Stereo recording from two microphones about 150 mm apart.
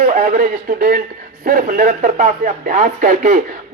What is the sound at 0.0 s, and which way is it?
A man's voice, 55° right (ahead or behind).